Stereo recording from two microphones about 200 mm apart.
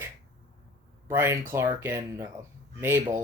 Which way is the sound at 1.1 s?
10° right (ahead or behind).